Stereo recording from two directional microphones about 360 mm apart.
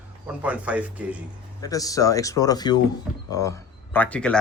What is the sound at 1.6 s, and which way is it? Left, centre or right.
Speech, centre.